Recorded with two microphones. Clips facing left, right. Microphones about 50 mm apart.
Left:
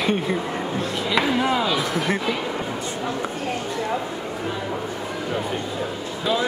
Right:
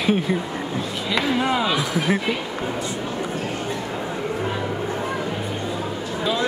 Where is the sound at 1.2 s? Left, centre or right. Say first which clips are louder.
Even; centre.